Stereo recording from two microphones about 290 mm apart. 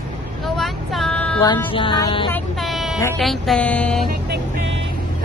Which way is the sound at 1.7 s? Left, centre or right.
Centre.